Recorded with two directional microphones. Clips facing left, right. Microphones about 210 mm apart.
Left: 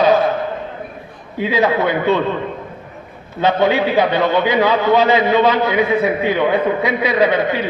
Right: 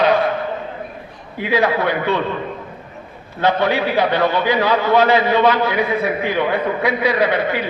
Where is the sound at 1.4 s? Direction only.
20° left (ahead or behind).